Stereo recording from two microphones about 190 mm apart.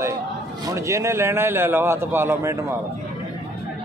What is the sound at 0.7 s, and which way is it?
A man's voice, 15° right (ahead or behind).